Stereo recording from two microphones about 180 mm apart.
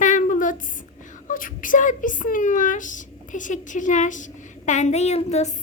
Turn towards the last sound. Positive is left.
turn(degrees=35)  # may be behind; listen again after turning